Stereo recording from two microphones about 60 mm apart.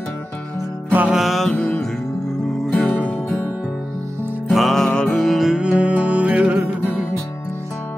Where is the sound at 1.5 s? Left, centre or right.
Centre.